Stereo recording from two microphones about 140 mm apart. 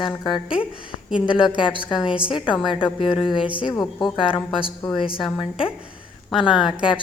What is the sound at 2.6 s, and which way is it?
Speech, 35° left (ahead or behind).